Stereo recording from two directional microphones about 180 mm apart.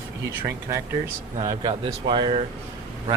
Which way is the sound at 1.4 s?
30° right (ahead or behind).